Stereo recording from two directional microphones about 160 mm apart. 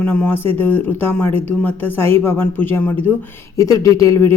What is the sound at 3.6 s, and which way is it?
Speech, 20° left (ahead or behind).